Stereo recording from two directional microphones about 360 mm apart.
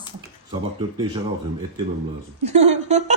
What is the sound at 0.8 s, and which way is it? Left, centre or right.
Speech, centre.